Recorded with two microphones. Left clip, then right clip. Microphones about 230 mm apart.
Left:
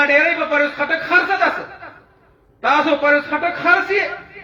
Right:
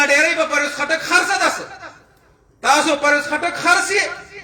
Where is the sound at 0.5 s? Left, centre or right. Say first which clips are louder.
Left 1 dB; right.